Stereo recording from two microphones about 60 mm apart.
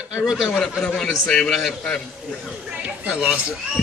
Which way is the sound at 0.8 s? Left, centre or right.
Centre.